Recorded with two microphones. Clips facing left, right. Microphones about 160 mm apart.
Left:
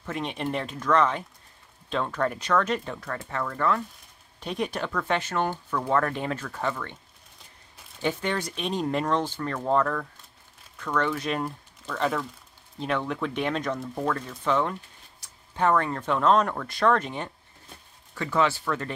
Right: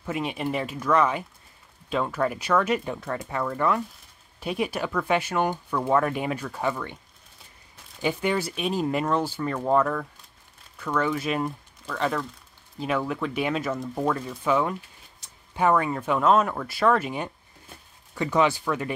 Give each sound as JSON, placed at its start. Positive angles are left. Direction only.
{"t": 0.0, "sound": "speech", "side_deg": -5}
{"t": 8.0, "sound": "speech", "side_deg": -10}